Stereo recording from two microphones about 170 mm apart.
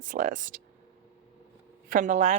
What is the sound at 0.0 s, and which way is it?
Speech, 50° right (ahead or behind).